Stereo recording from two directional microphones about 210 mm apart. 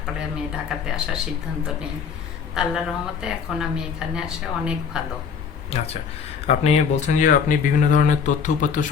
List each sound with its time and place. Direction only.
0.5 s speech: 5° right (ahead or behind)
5.7 s speech: 30° left (ahead or behind)